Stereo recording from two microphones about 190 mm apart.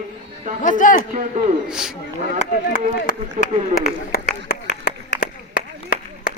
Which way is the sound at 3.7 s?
50° left (ahead or behind).